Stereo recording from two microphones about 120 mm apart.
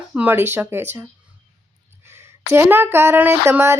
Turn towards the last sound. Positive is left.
turn(degrees=-20)  # may be behind; listen again after turning